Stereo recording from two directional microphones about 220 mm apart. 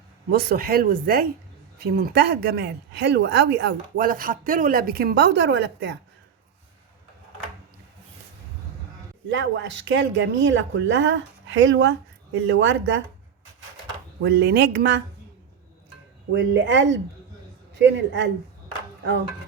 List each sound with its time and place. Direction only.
0.3 s speech: 45° right (ahead or behind)
9.3 s speech: 60° right (ahead or behind)
14.2 s speech: 55° right (ahead or behind)
16.3 s speech: 55° right (ahead or behind)